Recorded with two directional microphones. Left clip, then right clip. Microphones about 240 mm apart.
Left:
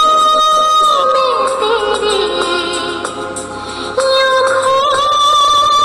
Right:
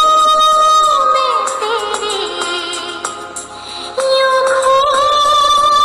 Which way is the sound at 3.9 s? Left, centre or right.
Centre.